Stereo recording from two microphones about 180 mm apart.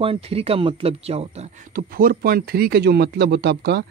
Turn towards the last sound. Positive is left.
turn(degrees=-65)  # may be behind; listen again after turning